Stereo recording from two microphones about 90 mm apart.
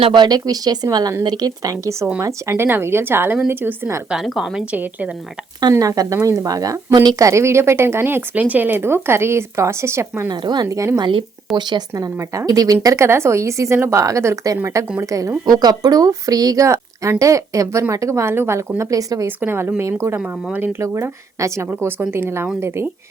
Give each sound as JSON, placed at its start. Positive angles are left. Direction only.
{"t": 0.0, "sound": "speech", "side_deg": -60}
{"t": 4.1, "sound": "a woman's voice", "side_deg": -5}
{"t": 5.7, "sound": "speech", "side_deg": -40}
{"t": 7.2, "sound": "speech", "side_deg": -35}
{"t": 10.2, "sound": "speech", "side_deg": -50}
{"t": 11.5, "sound": "speech", "side_deg": 0}
{"t": 11.9, "sound": "speech", "side_deg": -40}
{"t": 18.8, "sound": "speech", "side_deg": -40}
{"t": 19.4, "sound": "speech", "side_deg": -25}